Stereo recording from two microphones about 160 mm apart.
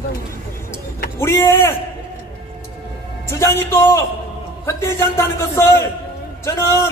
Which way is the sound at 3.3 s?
15° left (ahead or behind).